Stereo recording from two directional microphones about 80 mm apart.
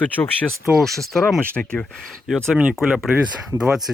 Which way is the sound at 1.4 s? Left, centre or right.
Centre.